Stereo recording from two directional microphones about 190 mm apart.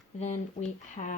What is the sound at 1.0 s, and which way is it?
Speech, 35° left (ahead or behind).